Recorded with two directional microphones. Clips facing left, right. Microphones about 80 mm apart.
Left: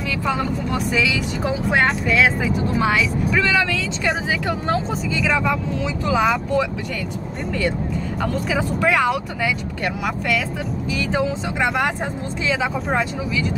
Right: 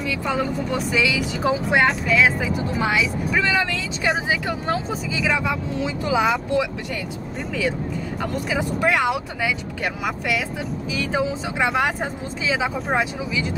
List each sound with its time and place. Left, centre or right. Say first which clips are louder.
0.2 s speech: left 2 dB; centre
3.3 s speech: left 1 dB; centre
8.2 s speech: left 2 dB; centre